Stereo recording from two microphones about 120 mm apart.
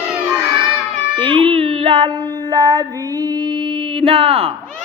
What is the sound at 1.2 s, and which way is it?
Child singing, 45° right (ahead or behind).